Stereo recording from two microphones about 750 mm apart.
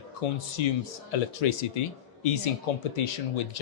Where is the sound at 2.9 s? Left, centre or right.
Left.